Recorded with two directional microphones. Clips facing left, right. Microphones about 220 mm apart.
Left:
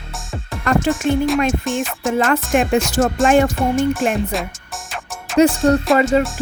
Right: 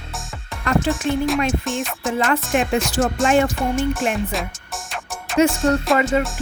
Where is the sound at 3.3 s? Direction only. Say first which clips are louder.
Left 3 dB; 45° left (ahead or behind).